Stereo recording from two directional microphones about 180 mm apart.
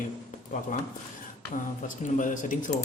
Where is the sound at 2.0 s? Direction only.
45° left (ahead or behind).